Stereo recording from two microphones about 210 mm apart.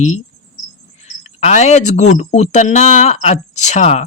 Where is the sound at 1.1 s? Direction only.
35° left (ahead or behind).